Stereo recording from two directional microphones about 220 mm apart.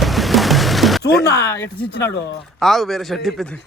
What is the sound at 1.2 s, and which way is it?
Speech, 15° left (ahead or behind).